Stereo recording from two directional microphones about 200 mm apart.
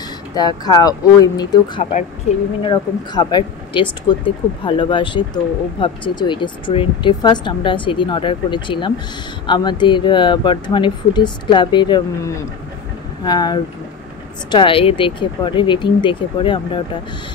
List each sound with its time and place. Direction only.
0.4 s speech: 20° left (ahead or behind)